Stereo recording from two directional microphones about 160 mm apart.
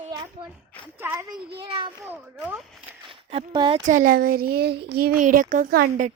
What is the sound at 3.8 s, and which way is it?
Speech, 55° right (ahead or behind).